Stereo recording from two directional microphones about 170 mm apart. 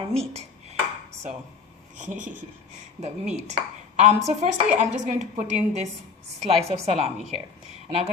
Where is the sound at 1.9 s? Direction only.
50° right (ahead or behind).